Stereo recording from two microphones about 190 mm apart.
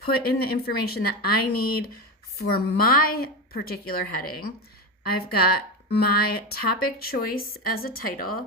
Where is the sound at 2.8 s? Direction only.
50° left (ahead or behind).